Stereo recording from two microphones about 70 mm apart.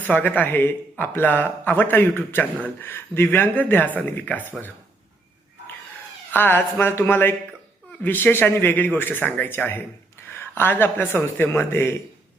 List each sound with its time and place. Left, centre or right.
0.0 s speech: left
6.3 s speech: left